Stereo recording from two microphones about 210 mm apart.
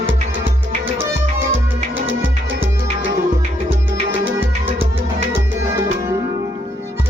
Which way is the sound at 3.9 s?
25° right (ahead or behind).